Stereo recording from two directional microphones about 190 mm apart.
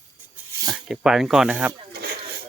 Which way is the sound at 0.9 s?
Centre (ahead or behind).